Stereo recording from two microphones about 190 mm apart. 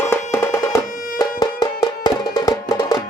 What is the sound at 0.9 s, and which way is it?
Music, 45° left (ahead or behind).